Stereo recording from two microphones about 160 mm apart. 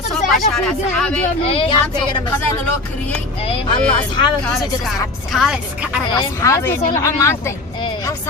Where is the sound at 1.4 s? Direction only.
35° left (ahead or behind).